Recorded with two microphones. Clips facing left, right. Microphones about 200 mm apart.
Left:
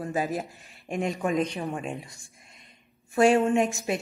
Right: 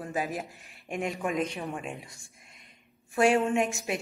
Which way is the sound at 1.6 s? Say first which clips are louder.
Left 4 dB; 35° left (ahead or behind).